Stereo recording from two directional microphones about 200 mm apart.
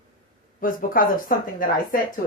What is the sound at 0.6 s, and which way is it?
Speech, 45° left (ahead or behind).